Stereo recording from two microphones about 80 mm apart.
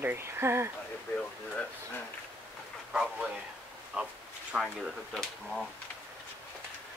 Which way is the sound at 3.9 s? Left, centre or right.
Centre.